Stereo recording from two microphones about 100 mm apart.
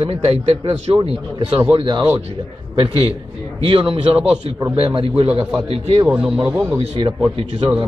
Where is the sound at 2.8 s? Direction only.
70° right (ahead or behind).